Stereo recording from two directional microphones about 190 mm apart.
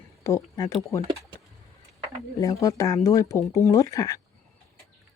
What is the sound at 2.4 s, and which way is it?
Speech, 15° left (ahead or behind).